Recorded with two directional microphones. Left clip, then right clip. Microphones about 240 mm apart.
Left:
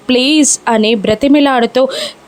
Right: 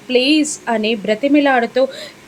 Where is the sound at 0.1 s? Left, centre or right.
Left.